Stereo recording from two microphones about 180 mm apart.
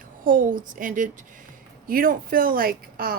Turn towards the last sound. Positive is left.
turn(degrees=-55)  # may be behind; listen again after turning